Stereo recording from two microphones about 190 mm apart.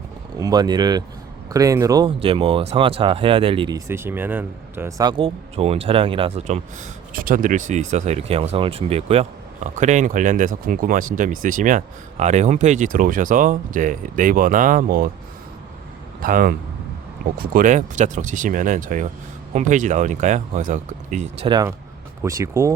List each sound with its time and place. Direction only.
0.3 s speech: 20° right (ahead or behind)
7.1 s speech: 45° right (ahead or behind)
16.2 s speech: 50° right (ahead or behind); by 21.7 s 25° right (ahead or behind)
22.2 s speech: 15° right (ahead or behind)